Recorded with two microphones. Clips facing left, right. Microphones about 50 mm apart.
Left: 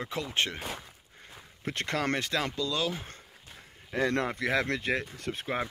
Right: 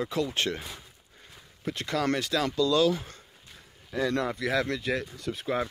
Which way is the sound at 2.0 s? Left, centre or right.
Left.